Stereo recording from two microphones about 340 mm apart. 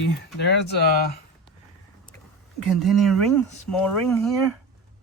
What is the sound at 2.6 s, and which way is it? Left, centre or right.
Speech, centre.